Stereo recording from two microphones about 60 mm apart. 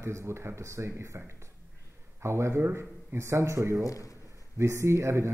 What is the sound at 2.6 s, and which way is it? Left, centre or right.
Speech, right.